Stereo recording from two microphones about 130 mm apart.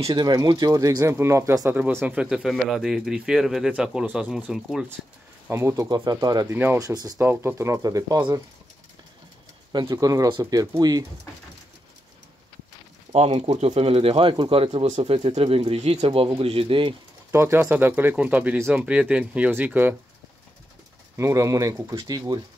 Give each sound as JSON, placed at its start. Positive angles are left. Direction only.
{"t": 0.0, "sound": "speech", "side_deg": -35}
{"t": 5.5, "sound": "speech", "side_deg": -20}
{"t": 5.9, "sound": "speech", "side_deg": -30}
{"t": 6.5, "sound": "speech", "side_deg": -15}
{"t": 6.8, "sound": "speech", "side_deg": -30}
{"t": 9.8, "sound": "speech", "side_deg": -25}
{"t": 13.1, "sound": "speech", "side_deg": -60}
{"t": 16.1, "sound": "speech", "side_deg": -45}
{"t": 17.3, "sound": "speech", "side_deg": -20}
{"t": 21.2, "sound": "speech", "side_deg": -25}